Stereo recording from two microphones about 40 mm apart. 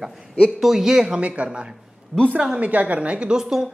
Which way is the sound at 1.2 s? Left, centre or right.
Right.